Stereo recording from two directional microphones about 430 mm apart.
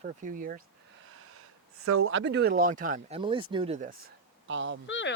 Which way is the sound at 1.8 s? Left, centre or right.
Right.